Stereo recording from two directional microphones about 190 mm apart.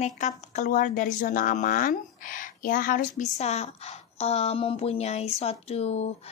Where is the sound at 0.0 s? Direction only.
35° left (ahead or behind).